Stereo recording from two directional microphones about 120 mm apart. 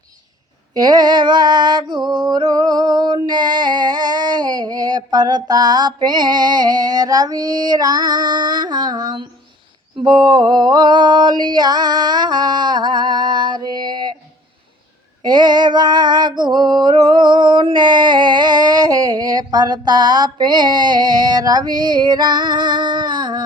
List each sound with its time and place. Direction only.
0.7 s a sound: 35° right (ahead or behind)
10.0 s female singing: 40° right (ahead or behind)
15.2 s female singing: 35° right (ahead or behind)